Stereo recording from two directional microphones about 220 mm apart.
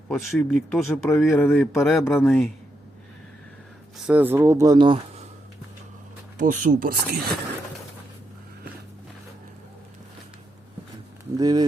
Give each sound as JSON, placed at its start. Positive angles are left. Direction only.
{"t": 0.1, "sound": "speech", "side_deg": 0}
{"t": 3.9, "sound": "speech", "side_deg": -5}
{"t": 6.3, "sound": "speech", "side_deg": -35}
{"t": 11.3, "sound": "speech", "side_deg": -20}